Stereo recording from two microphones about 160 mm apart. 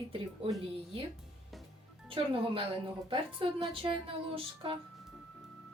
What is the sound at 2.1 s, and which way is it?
A woman's voice, 35° right (ahead or behind).